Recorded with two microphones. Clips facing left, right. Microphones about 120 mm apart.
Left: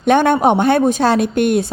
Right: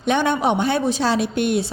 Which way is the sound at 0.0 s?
55° left (ahead or behind).